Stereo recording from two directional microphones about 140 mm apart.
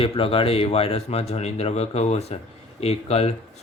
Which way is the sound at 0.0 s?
40° left (ahead or behind).